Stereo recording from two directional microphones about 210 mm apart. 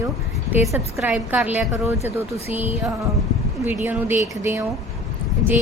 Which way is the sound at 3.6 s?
10° right (ahead or behind).